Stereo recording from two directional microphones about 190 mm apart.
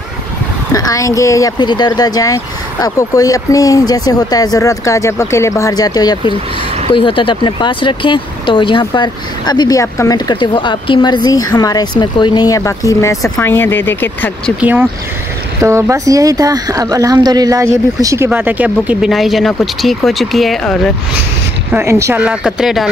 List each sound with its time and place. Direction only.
0.7 s speech: 20° left (ahead or behind)
14.6 s speech: 10° right (ahead or behind)
21.7 s speech: 15° right (ahead or behind)